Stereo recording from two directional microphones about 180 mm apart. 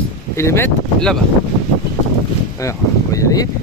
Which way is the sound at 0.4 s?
15° left (ahead or behind).